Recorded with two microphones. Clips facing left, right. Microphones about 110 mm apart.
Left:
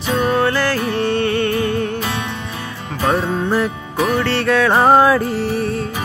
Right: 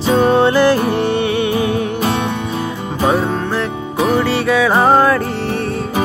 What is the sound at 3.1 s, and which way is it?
Music, centre (ahead or behind).